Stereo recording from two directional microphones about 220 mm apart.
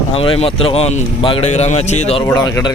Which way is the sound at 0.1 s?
25° left (ahead or behind).